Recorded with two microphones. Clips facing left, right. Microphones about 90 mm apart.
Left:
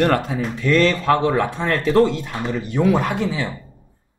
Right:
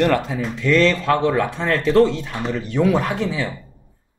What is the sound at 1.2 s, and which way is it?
Speech, 25° left (ahead or behind).